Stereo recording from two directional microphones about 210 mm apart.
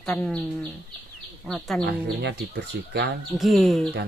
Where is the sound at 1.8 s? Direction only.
55° right (ahead or behind).